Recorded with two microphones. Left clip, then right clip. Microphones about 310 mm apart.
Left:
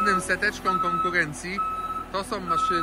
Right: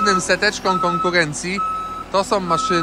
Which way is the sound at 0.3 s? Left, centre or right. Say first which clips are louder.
Right 7 dB; centre.